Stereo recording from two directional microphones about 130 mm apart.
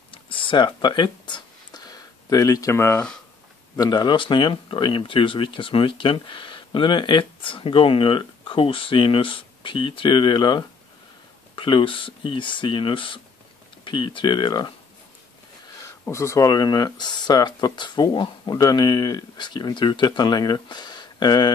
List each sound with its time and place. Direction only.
0.1 s a sound: 40° left (ahead or behind); by 3.1 s 20° left (ahead or behind)
3.7 s speech: 30° left (ahead or behind)
16.1 s speech: 20° left (ahead or behind)